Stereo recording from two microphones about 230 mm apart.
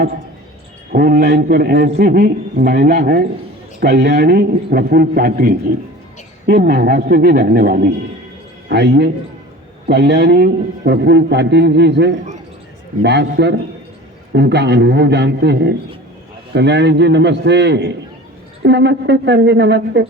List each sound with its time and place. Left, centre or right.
0.9 s a man's voice: right